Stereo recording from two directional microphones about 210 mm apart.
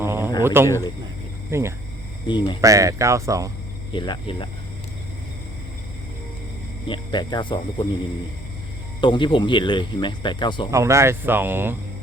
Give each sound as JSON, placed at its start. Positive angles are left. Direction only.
{"t": 0.0, "sound": "a sound", "side_deg": -10}
{"t": 0.4, "sound": "speech", "side_deg": -10}
{"t": 0.7, "sound": "speech", "side_deg": 15}
{"t": 1.5, "sound": "speech", "side_deg": -15}
{"t": 2.2, "sound": "speech", "side_deg": 20}
{"t": 2.6, "sound": "speech", "side_deg": -15}
{"t": 3.9, "sound": "speech", "side_deg": 20}
{"t": 6.8, "sound": "speech", "side_deg": 20}
{"t": 9.0, "sound": "speech", "side_deg": 20}
{"t": 10.7, "sound": "speech", "side_deg": -15}